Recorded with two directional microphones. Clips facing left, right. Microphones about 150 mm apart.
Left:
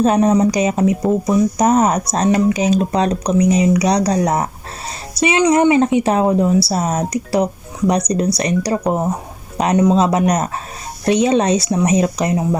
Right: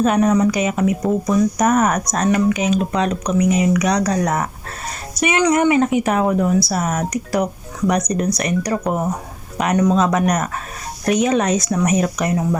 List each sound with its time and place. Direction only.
0.0 s speech: 30° left (ahead or behind)